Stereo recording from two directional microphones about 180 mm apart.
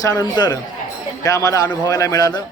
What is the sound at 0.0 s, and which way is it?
Speech, 20° left (ahead or behind).